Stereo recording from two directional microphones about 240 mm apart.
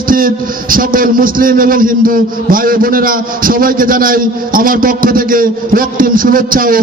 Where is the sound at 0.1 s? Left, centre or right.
Right.